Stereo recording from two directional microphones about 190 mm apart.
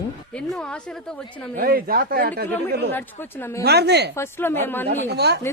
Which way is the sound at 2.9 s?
10° left (ahead or behind).